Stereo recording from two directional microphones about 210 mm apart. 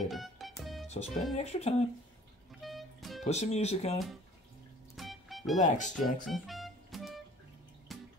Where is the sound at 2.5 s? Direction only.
Centre (ahead or behind).